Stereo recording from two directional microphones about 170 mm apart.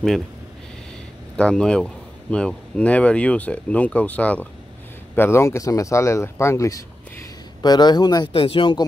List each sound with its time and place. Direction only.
1.3 s speech: 5° left (ahead or behind); by 8.8 s 30° left (ahead or behind)